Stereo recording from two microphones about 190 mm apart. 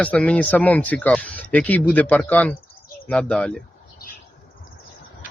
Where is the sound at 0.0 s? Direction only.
5° left (ahead or behind).